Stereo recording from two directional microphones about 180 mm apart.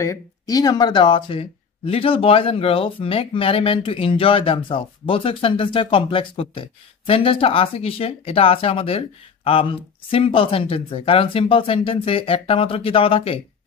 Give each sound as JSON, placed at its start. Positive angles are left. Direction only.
{"t": 0.0, "sound": "speech", "side_deg": 20}